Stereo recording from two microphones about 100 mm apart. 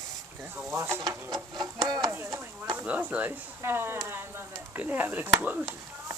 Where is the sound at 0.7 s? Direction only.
25° right (ahead or behind).